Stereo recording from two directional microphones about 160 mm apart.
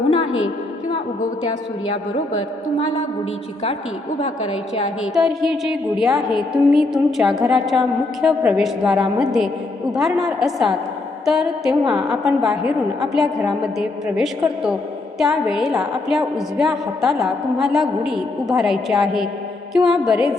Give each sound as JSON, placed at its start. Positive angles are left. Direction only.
{"t": 2.7, "sound": "a woman's voice", "side_deg": 45}
{"t": 5.1, "sound": "a woman's voice", "side_deg": 0}